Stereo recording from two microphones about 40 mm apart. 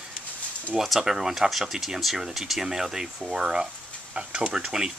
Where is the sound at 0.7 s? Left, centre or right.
Centre.